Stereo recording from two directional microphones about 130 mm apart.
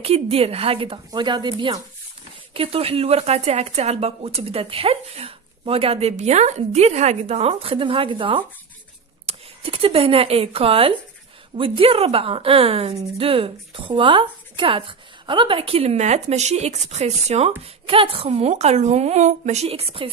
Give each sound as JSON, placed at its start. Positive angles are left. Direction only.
{"t": 0.0, "sound": "a woman's voice", "side_deg": -50}
{"t": 18.5, "sound": "speech", "side_deg": -60}